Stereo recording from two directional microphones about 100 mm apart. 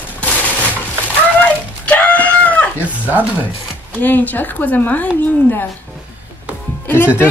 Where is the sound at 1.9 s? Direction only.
15° left (ahead or behind).